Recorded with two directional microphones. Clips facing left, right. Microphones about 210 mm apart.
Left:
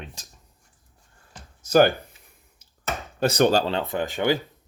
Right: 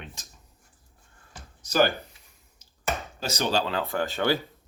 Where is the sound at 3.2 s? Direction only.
55° left (ahead or behind).